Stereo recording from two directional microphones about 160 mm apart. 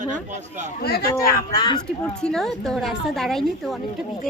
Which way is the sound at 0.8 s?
80° left.